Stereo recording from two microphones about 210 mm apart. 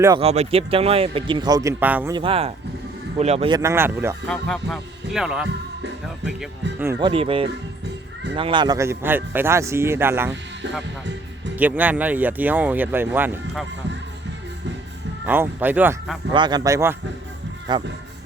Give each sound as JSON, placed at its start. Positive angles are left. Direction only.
{"t": 0.2, "sound": "speech", "side_deg": -30}
{"t": 2.1, "sound": "speech", "side_deg": -25}
{"t": 3.6, "sound": "speech", "side_deg": -10}
{"t": 7.0, "sound": "speech", "side_deg": -25}
{"t": 11.5, "sound": "speech", "side_deg": -10}
{"t": 15.3, "sound": "speech", "side_deg": -10}
{"t": 16.3, "sound": "speech", "side_deg": -20}